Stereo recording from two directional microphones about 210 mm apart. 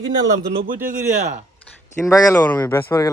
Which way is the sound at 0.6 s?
40° right (ahead or behind).